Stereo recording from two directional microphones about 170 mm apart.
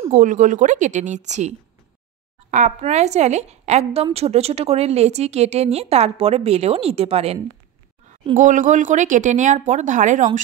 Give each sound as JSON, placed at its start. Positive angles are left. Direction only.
{"t": 0.1, "sound": "speech", "side_deg": -50}
{"t": 2.5, "sound": "a woman's voice", "side_deg": -45}
{"t": 8.4, "sound": "speech", "side_deg": -50}